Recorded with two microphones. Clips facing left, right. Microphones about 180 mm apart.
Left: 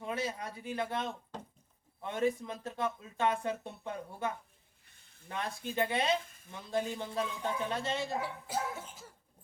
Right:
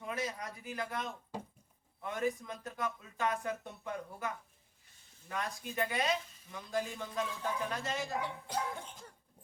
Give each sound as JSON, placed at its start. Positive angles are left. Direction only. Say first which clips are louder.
{"t": 0.0, "sound": "speech", "louder": "left 2 dB", "side_deg": 30}
{"t": 1.3, "sound": "a sound", "louder": "right 2 dB", "side_deg": -10}
{"t": 2.0, "sound": "speech", "louder": "left 3 dB", "side_deg": 25}
{"t": 6.2, "sound": "a sound", "louder": "left 2 dB", "side_deg": 50}
{"t": 6.5, "sound": "speech", "louder": "left 2 dB", "side_deg": 25}
{"t": 8.2, "sound": "speech", "louder": "left 1 dB", "side_deg": 5}